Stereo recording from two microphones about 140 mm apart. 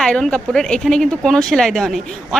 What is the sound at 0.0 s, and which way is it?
A woman's voice, 5° left (ahead or behind).